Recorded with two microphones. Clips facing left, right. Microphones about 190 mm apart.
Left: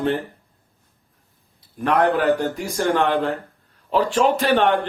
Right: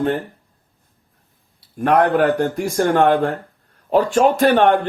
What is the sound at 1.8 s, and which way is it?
A man's voice, 50° right (ahead or behind).